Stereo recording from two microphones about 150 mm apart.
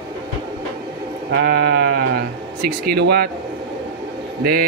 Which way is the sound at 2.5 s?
90° right.